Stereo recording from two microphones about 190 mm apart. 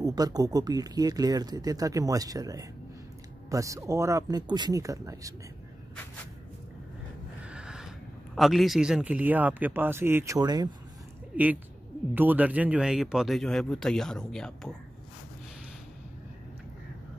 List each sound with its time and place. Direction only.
0.0 s speech: 20° right (ahead or behind)
7.4 s a sound: 5° right (ahead or behind)
8.4 s speech: centre (ahead or behind); by 10.7 s 20° right (ahead or behind)
11.3 s speech: 5° right (ahead or behind)